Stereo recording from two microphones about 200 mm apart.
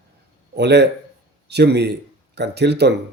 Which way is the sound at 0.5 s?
55° right (ahead or behind).